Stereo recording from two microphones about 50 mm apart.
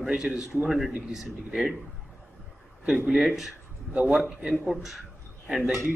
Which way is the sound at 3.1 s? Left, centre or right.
Centre.